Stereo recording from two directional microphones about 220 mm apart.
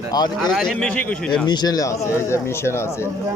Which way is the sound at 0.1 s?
15° left (ahead or behind).